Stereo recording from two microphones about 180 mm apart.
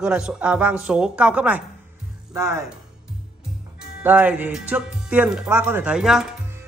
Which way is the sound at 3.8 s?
10° right (ahead or behind).